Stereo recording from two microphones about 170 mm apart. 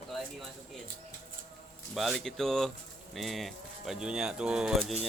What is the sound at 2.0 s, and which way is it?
Speech, centre (ahead or behind).